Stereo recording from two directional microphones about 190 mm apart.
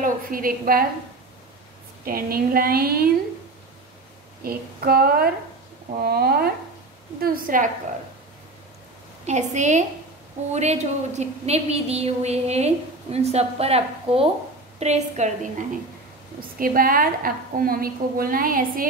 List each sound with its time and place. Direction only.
0.0 s a woman's voice: 50° right (ahead or behind)
2.0 s a woman's voice: 50° right (ahead or behind)
4.4 s a woman's voice: 50° right (ahead or behind)
9.2 s a woman's voice: 35° right (ahead or behind)
16.3 s a woman's voice: 50° right (ahead or behind)